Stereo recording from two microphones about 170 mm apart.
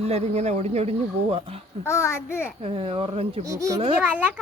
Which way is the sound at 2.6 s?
30° right (ahead or behind).